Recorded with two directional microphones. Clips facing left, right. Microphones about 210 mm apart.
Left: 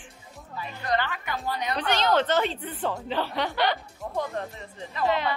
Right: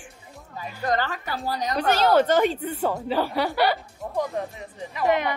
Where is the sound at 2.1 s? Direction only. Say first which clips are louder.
Right 5 dB; 10° right (ahead or behind).